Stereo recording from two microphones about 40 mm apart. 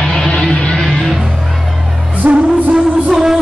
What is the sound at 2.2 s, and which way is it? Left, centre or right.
Music, right.